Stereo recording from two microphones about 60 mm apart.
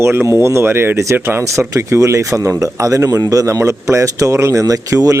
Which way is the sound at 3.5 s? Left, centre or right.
Right.